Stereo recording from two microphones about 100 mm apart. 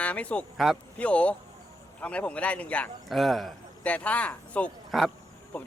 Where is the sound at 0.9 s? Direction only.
10° left (ahead or behind).